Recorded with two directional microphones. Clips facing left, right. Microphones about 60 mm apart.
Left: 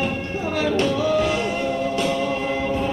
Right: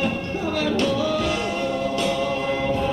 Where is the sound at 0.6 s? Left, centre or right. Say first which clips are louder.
Left 2 dB; left.